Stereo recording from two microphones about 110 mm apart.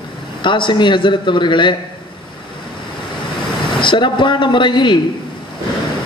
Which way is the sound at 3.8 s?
45° left (ahead or behind).